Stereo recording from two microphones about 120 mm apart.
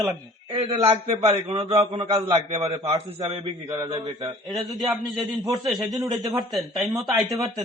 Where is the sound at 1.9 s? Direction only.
50° right (ahead or behind).